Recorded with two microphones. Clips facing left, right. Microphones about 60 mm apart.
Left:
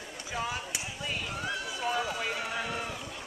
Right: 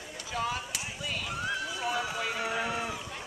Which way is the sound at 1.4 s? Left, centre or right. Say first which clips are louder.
Even; centre.